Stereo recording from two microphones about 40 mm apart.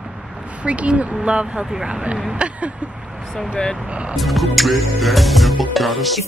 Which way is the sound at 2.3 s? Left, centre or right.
Right.